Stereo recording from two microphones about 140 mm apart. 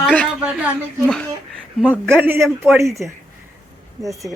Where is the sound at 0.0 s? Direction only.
10° left (ahead or behind).